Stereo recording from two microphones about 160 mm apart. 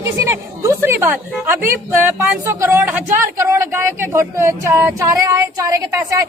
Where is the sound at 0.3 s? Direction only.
20° right (ahead or behind).